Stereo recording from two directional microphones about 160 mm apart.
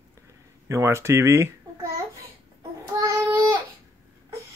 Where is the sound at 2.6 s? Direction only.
20° right (ahead or behind).